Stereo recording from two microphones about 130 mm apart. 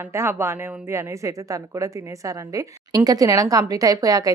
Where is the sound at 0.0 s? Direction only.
20° right (ahead or behind).